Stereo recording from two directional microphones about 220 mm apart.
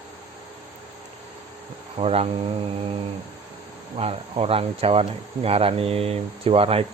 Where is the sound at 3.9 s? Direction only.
25° right (ahead or behind).